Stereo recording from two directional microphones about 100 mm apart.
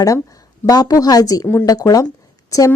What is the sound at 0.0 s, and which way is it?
A woman's voice, 35° left (ahead or behind).